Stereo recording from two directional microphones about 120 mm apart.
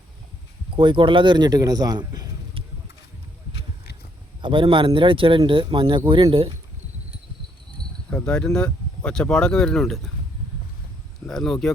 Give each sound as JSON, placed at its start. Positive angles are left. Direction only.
{"t": 0.8, "sound": "speech", "side_deg": -45}
{"t": 4.4, "sound": "speech", "side_deg": -45}
{"t": 8.1, "sound": "speech", "side_deg": 10}
{"t": 11.3, "sound": "speech", "side_deg": 5}